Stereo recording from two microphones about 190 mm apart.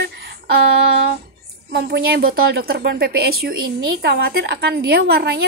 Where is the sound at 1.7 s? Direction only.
55° right (ahead or behind).